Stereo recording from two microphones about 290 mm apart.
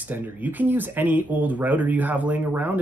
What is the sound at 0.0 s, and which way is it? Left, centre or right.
Speech, centre.